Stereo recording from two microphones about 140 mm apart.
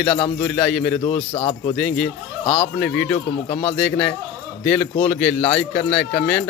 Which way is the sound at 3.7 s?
5° left (ahead or behind).